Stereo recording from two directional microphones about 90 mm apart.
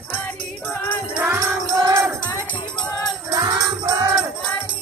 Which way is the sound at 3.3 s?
45° right (ahead or behind).